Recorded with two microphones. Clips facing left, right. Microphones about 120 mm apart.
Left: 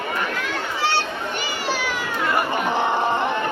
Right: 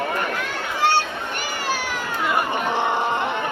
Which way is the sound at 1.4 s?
45° right (ahead or behind).